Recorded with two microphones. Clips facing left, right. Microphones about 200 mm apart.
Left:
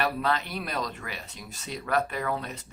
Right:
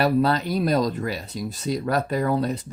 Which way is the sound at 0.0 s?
35° right (ahead or behind).